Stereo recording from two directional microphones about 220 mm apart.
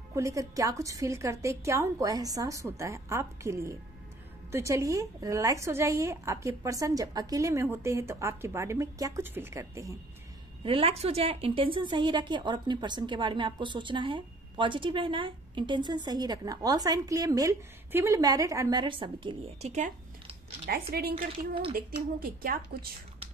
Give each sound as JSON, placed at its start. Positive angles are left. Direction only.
{"t": 0.1, "sound": "a woman's voice", "side_deg": -15}
{"t": 10.6, "sound": "a woman's voice", "side_deg": -25}